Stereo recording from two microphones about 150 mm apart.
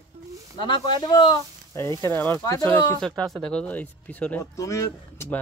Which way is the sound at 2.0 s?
15° left (ahead or behind).